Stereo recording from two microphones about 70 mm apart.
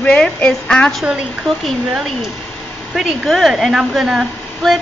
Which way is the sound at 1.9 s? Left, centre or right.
Centre.